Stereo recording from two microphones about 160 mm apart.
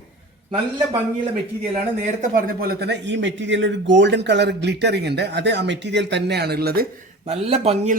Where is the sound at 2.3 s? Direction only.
75° right (ahead or behind).